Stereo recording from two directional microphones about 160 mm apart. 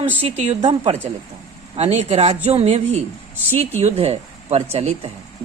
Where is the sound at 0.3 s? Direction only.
45° right (ahead or behind).